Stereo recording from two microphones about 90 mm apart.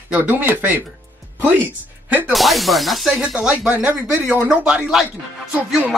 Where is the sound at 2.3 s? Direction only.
Centre (ahead or behind).